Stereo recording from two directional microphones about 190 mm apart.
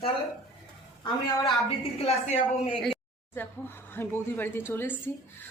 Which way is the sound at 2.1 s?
35° left (ahead or behind).